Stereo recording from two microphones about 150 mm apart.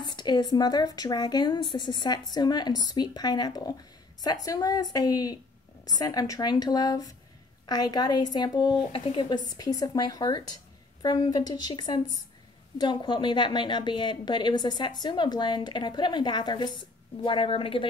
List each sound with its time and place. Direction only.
0.0 s a woman's voice: 30° left (ahead or behind)